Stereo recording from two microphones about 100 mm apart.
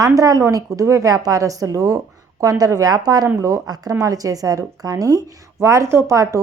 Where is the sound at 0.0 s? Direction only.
35° right (ahead or behind).